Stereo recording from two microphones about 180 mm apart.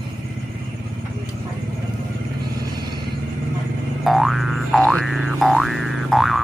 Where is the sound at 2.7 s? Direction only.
25° right (ahead or behind).